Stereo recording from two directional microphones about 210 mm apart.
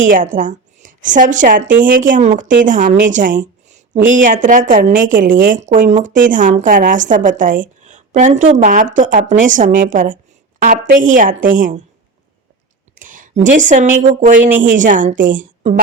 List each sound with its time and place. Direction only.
0.3 s a woman's voice: 40° right (ahead or behind)
13.0 s a woman's voice: 40° right (ahead or behind)